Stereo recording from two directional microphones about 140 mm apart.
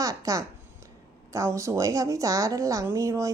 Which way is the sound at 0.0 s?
25° right (ahead or behind).